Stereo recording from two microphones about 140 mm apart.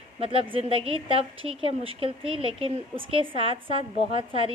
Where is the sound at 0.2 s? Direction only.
45° right (ahead or behind).